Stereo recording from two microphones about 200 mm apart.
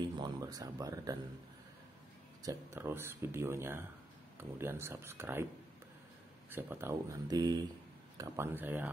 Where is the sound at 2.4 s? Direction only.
15° right (ahead or behind).